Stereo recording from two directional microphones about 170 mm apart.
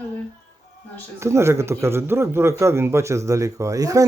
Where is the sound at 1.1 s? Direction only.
15° right (ahead or behind).